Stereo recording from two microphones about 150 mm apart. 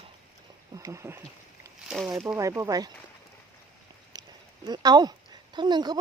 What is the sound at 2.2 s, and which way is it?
Speech, 20° right (ahead or behind).